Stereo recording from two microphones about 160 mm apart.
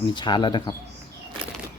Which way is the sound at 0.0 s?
30° left (ahead or behind).